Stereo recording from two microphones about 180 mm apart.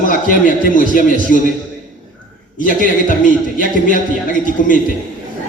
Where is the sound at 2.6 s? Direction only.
50° left (ahead or behind).